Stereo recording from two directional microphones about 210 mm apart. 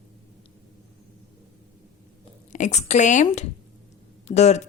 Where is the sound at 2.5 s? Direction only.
35° left (ahead or behind).